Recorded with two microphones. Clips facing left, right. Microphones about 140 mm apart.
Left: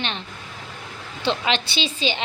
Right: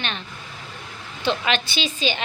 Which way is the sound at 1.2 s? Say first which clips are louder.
Even; 25° left (ahead or behind).